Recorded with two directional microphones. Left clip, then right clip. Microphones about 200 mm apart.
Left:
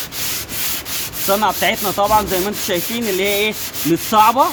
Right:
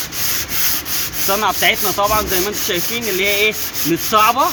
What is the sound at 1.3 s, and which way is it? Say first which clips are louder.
Rub: even; 50° left (ahead or behind).